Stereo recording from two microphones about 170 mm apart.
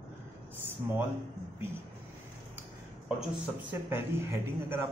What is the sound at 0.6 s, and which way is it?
Speech, 15° right (ahead or behind).